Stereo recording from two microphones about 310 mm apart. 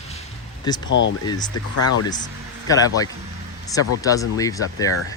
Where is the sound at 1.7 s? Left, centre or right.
Left.